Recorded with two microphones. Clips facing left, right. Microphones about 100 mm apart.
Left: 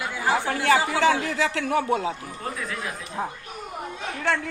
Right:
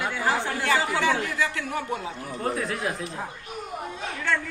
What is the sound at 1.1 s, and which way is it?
A man's voice, 90° left.